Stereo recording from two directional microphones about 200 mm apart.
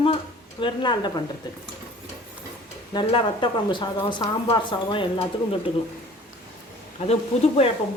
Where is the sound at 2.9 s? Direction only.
25° left (ahead or behind).